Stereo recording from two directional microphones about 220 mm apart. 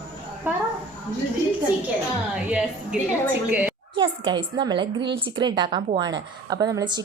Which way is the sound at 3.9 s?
20° right (ahead or behind).